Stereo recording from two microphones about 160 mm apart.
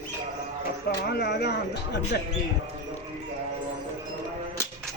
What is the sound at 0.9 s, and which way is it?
Speech, 90° left.